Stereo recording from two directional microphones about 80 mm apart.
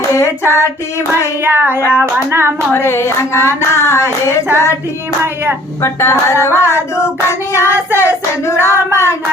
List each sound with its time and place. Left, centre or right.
0.2 s child singing: left
1.5 s hands: right
2.7 s child singing: left
5.8 s child singing: left